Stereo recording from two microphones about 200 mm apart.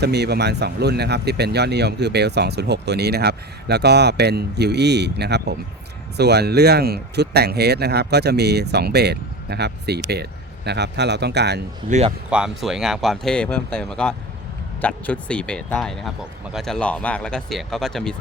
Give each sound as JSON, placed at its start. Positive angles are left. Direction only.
{"t": 0.0, "sound": "speech", "side_deg": -55}
{"t": 11.9, "sound": "speech", "side_deg": -35}
{"t": 12.3, "sound": "speech", "side_deg": -5}